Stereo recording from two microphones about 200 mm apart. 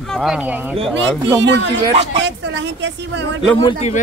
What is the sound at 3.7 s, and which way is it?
Speech, 35° left (ahead or behind).